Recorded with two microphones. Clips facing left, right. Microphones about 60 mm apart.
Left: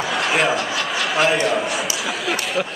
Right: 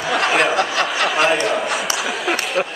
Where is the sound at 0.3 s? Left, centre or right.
Centre.